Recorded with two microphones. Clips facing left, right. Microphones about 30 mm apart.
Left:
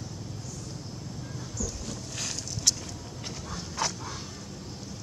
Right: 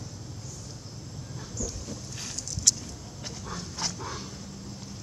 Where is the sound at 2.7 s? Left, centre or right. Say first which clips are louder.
Right 1 dB; centre.